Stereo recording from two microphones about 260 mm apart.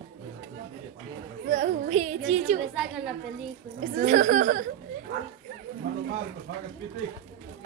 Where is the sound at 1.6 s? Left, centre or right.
Right.